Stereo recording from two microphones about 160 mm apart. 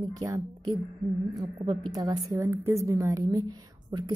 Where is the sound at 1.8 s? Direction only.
20° right (ahead or behind).